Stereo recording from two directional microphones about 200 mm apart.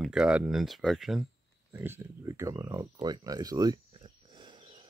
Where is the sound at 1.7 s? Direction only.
10° right (ahead or behind).